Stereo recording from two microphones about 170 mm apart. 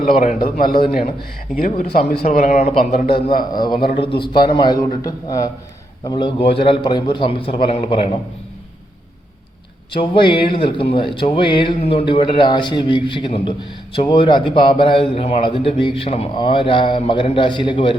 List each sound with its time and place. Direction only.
0.0 s speech: 55° left (ahead or behind)
0.9 s speech: 40° left (ahead or behind)
1.5 s speech: 55° left (ahead or behind)
3.6 s a man's voice: 25° left (ahead or behind)
9.9 s a man's voice: 30° left (ahead or behind)